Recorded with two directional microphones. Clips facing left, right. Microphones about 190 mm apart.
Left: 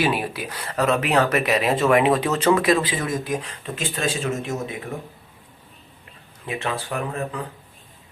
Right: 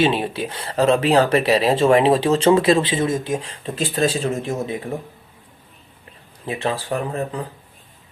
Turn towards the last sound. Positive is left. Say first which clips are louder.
# right 3 dB
turn(degrees=-30)  # may be behind; listen again after turning